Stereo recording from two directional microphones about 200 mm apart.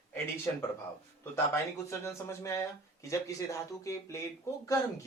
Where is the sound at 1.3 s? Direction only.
15° left (ahead or behind).